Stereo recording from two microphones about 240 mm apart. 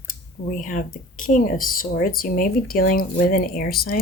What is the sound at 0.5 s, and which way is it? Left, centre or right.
Speech, left.